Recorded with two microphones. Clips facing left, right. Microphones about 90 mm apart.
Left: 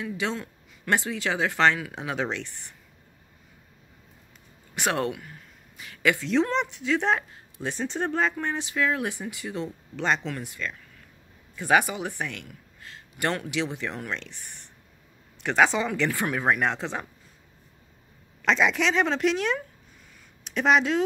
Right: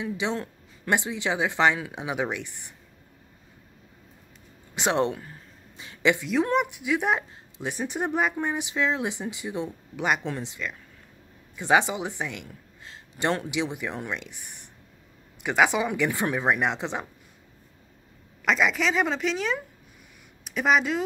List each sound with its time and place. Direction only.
0.0 s a woman's voice: 20° right (ahead or behind)
4.7 s a sound: 20° right (ahead or behind)
6.4 s a woman's voice: 15° right (ahead or behind)
18.4 s a woman's voice: 5° right (ahead or behind)